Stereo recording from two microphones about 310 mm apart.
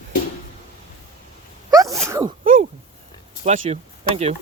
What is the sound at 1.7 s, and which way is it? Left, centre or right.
Sneeze, centre.